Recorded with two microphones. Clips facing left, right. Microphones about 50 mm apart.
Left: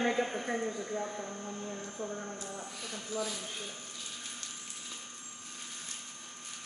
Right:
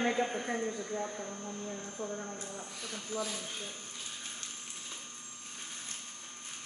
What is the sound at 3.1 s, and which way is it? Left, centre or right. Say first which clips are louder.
Speech: left 1 dB; right.